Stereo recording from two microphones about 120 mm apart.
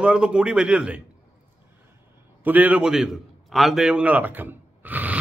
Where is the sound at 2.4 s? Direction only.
10° right (ahead or behind).